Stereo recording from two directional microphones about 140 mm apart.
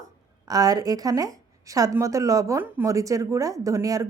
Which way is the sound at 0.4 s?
25° right (ahead or behind).